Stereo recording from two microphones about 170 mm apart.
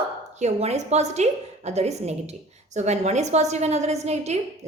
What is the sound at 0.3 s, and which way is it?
A woman's voice, 40° right (ahead or behind).